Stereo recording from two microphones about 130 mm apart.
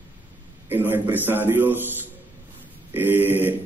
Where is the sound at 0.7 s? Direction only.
15° right (ahead or behind).